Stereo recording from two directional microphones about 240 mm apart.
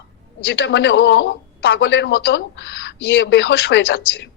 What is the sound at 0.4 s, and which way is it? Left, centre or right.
Speech, left.